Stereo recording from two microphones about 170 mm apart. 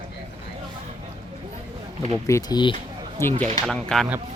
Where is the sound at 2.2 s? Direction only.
20° left (ahead or behind).